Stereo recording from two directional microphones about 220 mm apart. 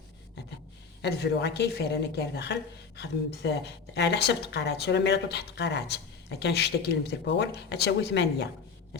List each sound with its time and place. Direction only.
1.0 s speech: 50° left (ahead or behind)